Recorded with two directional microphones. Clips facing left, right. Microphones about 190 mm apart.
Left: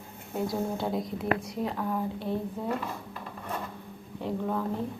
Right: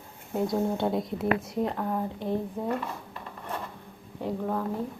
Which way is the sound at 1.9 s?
20° right (ahead or behind).